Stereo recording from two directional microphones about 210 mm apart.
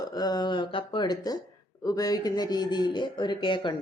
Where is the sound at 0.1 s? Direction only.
20° left (ahead or behind).